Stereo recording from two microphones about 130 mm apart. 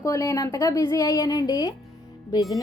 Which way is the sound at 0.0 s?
25° left (ahead or behind).